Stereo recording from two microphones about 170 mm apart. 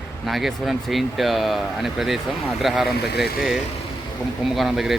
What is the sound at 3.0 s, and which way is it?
Speech, 70° left (ahead or behind).